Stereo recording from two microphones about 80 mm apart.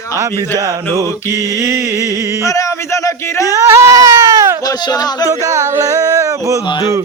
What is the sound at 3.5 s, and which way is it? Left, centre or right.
Speech, right.